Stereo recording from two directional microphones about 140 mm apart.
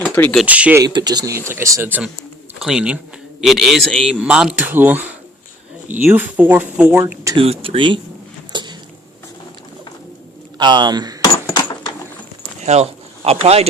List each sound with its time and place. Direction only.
0.0 s speech: 10° left (ahead or behind)
0.4 s speech: 10° right (ahead or behind)
0.8 s speech: 30° right (ahead or behind)
2.6 s a man's voice: 5° right (ahead or behind)
6.9 s speech: 20° right (ahead or behind)
7.3 s speech: 45° right (ahead or behind)
8.5 s a sound: 35° right (ahead or behind)
10.6 s speech: 30° right (ahead or behind)
11.2 s a sound: 30° left (ahead or behind)
12.6 s speech: 50° right (ahead or behind)